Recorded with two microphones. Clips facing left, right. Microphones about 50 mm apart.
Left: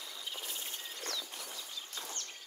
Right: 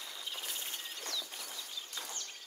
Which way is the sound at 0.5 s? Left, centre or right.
Right.